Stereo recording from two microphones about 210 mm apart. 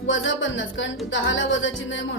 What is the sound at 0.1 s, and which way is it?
Speech, 65° left (ahead or behind).